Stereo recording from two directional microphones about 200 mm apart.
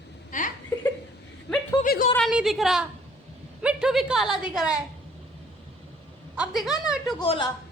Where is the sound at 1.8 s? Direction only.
45° left (ahead or behind).